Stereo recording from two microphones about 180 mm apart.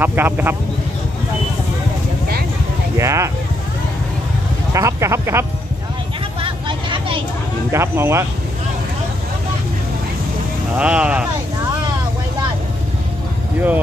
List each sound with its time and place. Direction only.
0.0 s speech: 10° right (ahead or behind)
3.0 s speech: 15° right (ahead or behind)
4.7 s speech: 15° right (ahead or behind)
6.4 s chatter: 30° right (ahead or behind)
7.7 s speech: 15° right (ahead or behind)
10.8 s speech: 5° right (ahead or behind)